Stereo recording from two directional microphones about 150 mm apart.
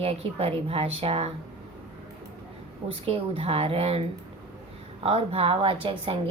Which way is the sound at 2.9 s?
40° right (ahead or behind).